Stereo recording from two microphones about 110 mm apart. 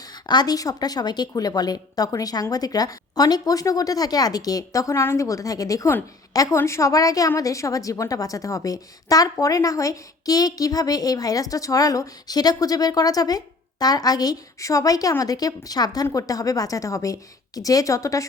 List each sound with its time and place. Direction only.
0.0 s a woman's voice: 40° left (ahead or behind)